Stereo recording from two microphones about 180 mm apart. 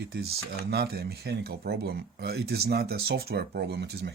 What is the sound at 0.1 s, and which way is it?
Speech, 60° right (ahead or behind).